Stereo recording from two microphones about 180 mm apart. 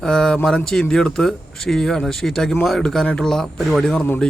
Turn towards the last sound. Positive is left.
turn(degrees=5)  # may be behind; listen again after turning